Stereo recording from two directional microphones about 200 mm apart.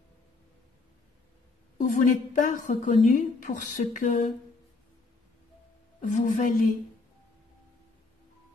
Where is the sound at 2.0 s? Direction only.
40° left (ahead or behind).